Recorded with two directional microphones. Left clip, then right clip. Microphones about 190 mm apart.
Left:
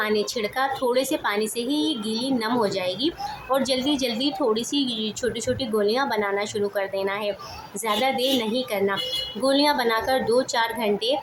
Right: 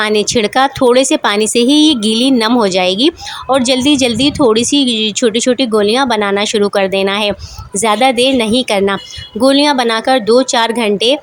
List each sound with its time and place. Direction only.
0.0 s speech: 50° right (ahead or behind)